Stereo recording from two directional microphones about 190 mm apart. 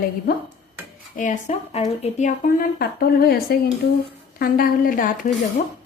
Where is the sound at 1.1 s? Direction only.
40° left (ahead or behind).